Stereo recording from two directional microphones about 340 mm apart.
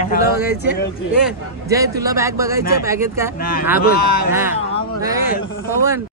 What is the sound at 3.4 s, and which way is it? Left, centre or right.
Speech, left.